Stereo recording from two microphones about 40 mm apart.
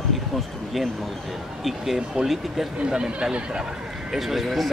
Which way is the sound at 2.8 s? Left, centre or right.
Right.